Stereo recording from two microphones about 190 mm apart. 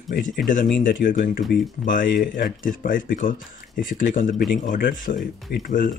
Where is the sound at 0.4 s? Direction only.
Centre (ahead or behind).